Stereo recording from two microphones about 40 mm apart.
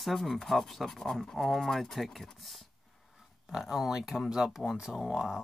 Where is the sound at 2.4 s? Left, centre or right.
Centre.